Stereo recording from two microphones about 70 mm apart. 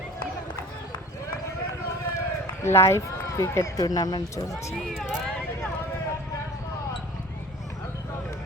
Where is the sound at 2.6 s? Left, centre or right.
Left.